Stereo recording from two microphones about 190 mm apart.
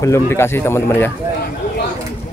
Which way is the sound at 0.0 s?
15° left (ahead or behind).